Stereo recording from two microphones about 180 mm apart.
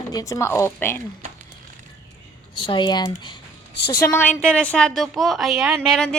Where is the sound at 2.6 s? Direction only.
25° left (ahead or behind).